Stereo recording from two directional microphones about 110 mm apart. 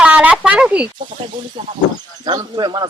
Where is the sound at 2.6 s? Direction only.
40° right (ahead or behind).